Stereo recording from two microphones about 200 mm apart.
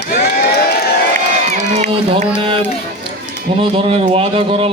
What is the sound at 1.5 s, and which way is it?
Speech, 30° right (ahead or behind).